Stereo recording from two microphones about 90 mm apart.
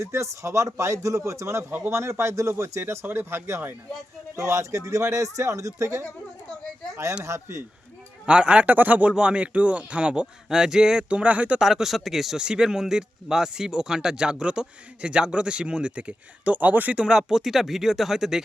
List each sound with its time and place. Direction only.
0.0 s speech: 35° right (ahead or behind)
8.3 s speech: 10° right (ahead or behind)